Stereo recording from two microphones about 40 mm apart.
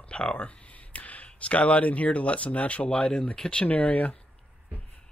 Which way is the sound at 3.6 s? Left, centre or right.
Left.